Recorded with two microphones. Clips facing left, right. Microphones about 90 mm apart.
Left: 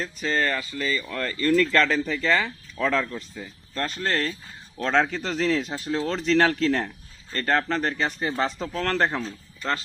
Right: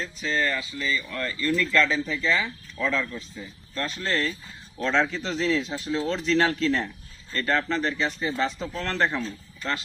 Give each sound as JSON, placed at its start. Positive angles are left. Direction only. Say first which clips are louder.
{"t": 0.2, "sound": "speech", "louder": "left 1 dB", "side_deg": 50}